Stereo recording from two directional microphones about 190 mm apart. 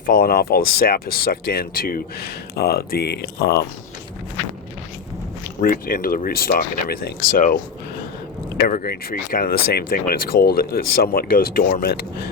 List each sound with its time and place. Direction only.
0.1 s speech: 50° left (ahead or behind)
5.6 s speech: 50° left (ahead or behind)